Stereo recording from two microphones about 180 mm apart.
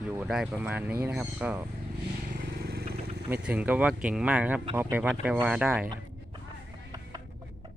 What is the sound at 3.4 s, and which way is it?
Speech, 5° right (ahead or behind).